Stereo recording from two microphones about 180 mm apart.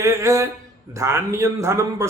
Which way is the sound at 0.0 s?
15° right (ahead or behind).